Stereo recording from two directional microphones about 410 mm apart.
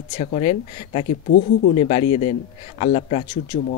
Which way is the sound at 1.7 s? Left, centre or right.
Centre.